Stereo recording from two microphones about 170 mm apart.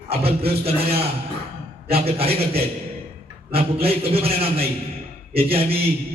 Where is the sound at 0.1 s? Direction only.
35° right (ahead or behind).